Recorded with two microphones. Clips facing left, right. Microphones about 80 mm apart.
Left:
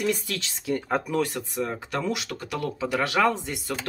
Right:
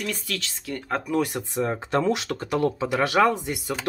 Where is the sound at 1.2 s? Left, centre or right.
Right.